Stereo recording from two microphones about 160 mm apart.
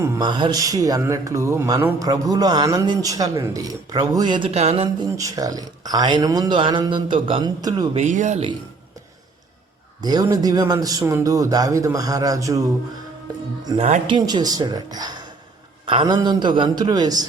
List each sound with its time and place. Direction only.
0.0 s speech: 25° right (ahead or behind)
5.0 s speech: 20° right (ahead or behind)
7.9 s speech: 50° right (ahead or behind)
10.0 s speech: 25° right (ahead or behind)
13.7 s speech: 45° right (ahead or behind)
14.1 s speech: 25° right (ahead or behind)